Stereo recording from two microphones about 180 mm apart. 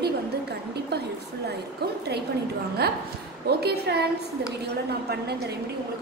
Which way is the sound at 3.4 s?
65° right (ahead or behind).